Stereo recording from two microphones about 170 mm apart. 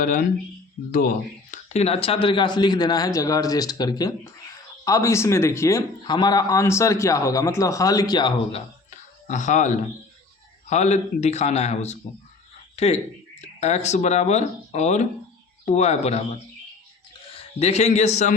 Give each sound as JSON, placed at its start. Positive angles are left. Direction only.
{"t": 0.0, "sound": "a man's voice", "side_deg": 55}
{"t": 8.9, "sound": "a sound", "side_deg": 45}
{"t": 10.7, "sound": "a man's voice", "side_deg": 40}